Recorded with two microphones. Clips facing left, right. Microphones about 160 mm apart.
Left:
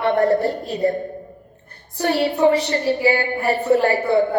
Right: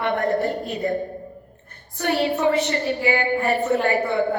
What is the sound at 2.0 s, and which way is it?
A woman's voice, 35° left (ahead or behind).